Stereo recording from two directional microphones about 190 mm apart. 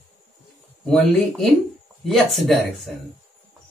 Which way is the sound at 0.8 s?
5° left (ahead or behind).